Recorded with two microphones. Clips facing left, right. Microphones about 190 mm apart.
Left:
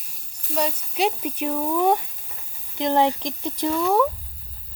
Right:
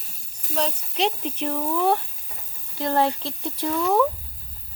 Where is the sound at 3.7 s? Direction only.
Centre (ahead or behind).